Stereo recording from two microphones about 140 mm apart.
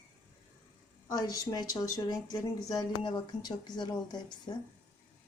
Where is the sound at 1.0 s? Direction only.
30° left (ahead or behind).